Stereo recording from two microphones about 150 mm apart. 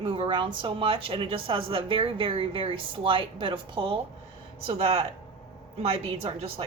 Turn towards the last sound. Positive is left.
turn(degrees=-40)  # may be behind; listen again after turning